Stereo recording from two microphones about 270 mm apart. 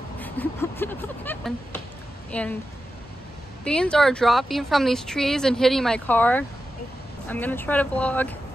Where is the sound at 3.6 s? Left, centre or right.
Centre.